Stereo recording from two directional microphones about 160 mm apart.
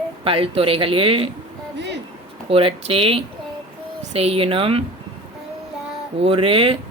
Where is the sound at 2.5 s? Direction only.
35° right (ahead or behind).